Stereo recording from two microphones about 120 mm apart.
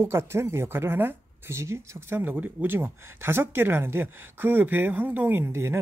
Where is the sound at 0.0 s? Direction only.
20° right (ahead or behind).